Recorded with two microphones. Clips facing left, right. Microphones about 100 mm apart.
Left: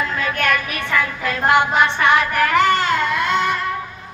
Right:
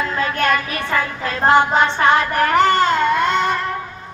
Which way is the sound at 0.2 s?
25° right (ahead or behind).